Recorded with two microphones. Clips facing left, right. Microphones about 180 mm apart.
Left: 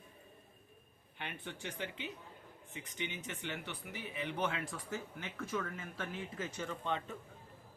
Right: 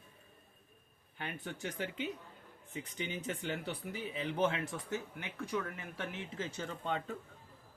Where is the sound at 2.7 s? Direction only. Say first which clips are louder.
Right 3 dB; 35° right (ahead or behind).